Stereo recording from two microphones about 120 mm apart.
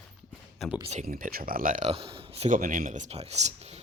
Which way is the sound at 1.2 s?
90° right.